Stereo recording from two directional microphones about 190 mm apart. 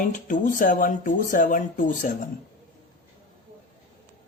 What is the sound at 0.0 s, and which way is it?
Speech, 45° left (ahead or behind).